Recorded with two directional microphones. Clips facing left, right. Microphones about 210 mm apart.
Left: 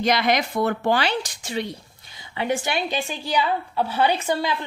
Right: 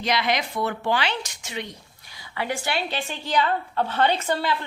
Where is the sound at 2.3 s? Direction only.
20° left (ahead or behind).